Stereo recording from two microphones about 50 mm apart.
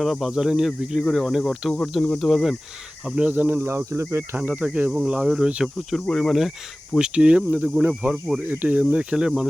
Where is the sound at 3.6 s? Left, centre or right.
Right.